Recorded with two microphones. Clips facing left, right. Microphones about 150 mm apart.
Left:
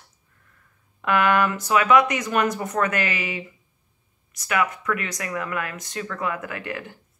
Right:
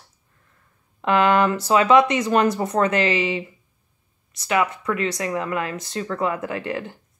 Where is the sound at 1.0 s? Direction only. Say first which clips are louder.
Right 3 dB; 25° right (ahead or behind).